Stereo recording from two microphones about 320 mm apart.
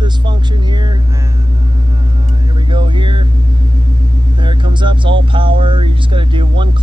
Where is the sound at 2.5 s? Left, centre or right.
Centre.